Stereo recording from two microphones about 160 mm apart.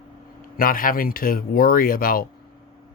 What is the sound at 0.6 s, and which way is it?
Speech, 65° left (ahead or behind).